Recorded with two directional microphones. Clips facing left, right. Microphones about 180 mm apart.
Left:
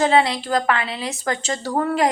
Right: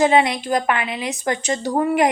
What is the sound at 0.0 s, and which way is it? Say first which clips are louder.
A woman's voice: right 1 dB; 15° right (ahead or behind).